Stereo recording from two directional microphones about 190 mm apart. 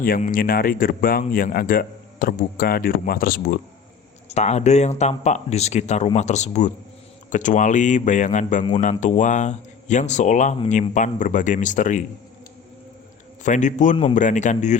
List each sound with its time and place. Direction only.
0.0 s a man's voice: 45° left (ahead or behind)
4.3 s speech: 35° left (ahead or behind)
13.4 s speech: 40° left (ahead or behind)